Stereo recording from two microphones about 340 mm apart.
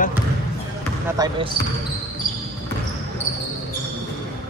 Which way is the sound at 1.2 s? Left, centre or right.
Centre.